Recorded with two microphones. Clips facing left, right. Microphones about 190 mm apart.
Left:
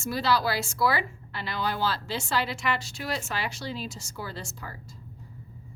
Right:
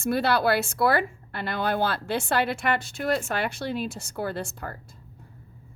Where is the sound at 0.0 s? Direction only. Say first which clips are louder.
Right 3 dB; 60° right (ahead or behind).